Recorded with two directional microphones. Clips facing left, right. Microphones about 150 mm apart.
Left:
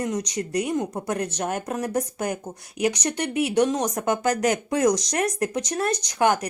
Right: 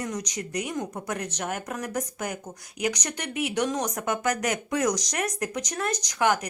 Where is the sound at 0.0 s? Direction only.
30° left (ahead or behind).